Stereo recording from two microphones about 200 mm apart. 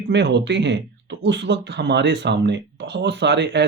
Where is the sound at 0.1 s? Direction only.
60° right (ahead or behind).